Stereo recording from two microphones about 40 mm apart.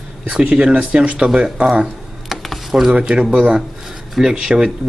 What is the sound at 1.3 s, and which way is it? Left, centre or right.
Speech, right.